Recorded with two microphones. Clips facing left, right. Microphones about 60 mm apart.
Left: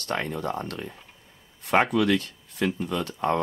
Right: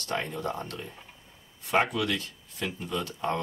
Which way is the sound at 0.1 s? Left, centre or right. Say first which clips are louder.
Left 3 dB; left.